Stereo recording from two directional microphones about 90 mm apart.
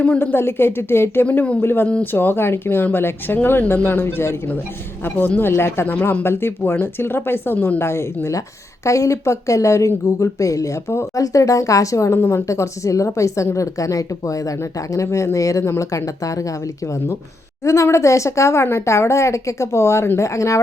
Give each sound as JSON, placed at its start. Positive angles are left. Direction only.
{"t": 0.0, "sound": "speech", "side_deg": 20}
{"t": 17.7, "sound": "speech", "side_deg": 35}